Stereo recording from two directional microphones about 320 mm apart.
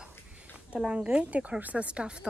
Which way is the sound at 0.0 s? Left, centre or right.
Centre.